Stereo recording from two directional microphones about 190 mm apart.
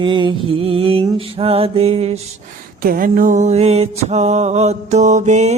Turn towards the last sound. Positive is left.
turn(degrees=-40)  # may be behind; listen again after turning